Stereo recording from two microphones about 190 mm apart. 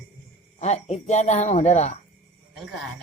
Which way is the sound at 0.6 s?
35° left (ahead or behind).